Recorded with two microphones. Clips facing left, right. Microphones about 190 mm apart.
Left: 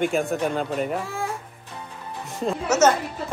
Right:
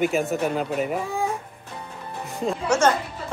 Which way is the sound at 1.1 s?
15° right (ahead or behind).